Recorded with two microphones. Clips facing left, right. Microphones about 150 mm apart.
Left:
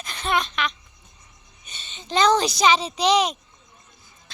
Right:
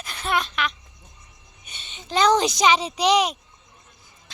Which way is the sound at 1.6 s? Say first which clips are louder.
Even; 10° right (ahead or behind).